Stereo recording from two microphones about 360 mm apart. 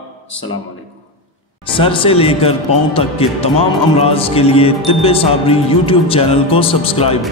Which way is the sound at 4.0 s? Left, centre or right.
Centre.